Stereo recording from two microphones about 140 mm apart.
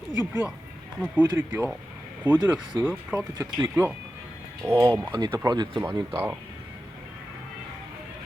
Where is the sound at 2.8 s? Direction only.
15° right (ahead or behind).